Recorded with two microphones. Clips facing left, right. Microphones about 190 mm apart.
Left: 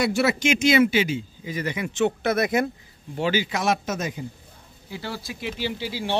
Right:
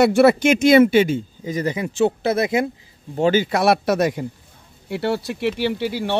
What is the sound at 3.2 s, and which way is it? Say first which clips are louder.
Speech: right 7 dB; 45° right (ahead or behind).